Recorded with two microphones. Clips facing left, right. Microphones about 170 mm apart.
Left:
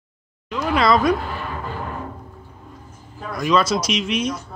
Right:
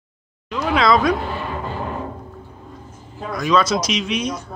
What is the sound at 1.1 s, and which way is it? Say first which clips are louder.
Music: right 1 dB; 25° right (ahead or behind).